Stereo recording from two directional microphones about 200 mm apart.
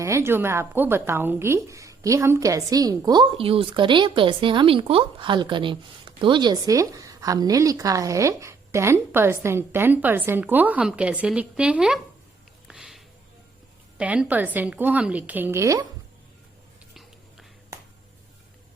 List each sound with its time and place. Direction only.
0.0 s a woman's voice: 15° right (ahead or behind)
12.6 s a sound: 5° right (ahead or behind)
14.0 s a woman's voice: 5° right (ahead or behind)
16.9 s whispering: centre (ahead or behind)